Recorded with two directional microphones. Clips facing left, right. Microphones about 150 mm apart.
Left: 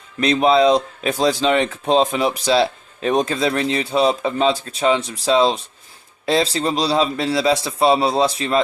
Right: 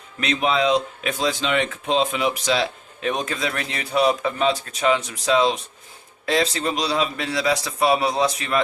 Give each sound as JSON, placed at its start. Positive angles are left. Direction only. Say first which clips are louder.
{"t": 0.2, "sound": "speech", "louder": "left 7 dB", "side_deg": 35}